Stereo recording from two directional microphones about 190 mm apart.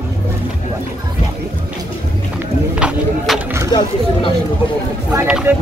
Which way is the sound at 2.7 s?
5° right (ahead or behind).